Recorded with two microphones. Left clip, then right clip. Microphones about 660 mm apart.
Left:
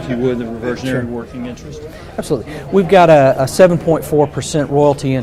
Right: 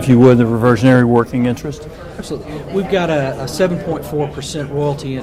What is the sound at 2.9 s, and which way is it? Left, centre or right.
A man's voice, left.